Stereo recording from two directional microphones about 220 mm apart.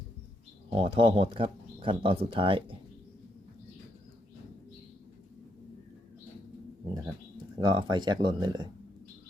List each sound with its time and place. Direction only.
0.7 s speech: 25° right (ahead or behind)
7.6 s speech: 20° right (ahead or behind)